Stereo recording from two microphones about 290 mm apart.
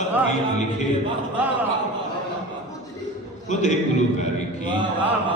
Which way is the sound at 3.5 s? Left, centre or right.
Left.